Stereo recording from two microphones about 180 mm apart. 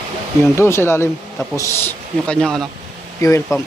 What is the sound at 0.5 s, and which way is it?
A man's voice, 15° left (ahead or behind).